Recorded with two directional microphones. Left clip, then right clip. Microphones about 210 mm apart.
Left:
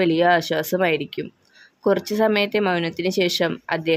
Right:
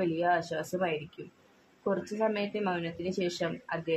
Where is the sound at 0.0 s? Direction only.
50° left (ahead or behind).